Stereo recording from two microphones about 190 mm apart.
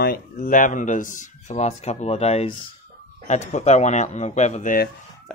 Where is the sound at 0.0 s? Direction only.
45° left (ahead or behind).